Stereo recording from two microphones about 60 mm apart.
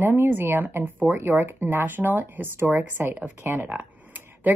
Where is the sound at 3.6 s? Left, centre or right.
Right.